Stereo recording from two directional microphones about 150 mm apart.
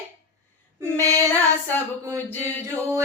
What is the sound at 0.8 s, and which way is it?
Female singing, 20° right (ahead or behind).